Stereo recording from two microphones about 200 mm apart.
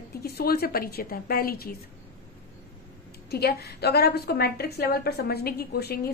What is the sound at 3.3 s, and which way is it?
A woman's voice, 55° left (ahead or behind).